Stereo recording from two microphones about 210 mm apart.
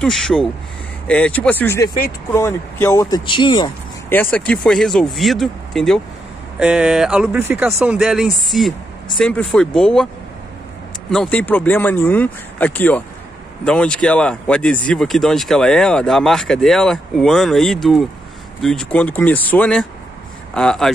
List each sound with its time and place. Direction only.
0.0 s speech: centre (ahead or behind); by 3.7 s 20° left (ahead or behind)
4.1 s speech: 10° left (ahead or behind)
11.1 s speech: 5° left (ahead or behind)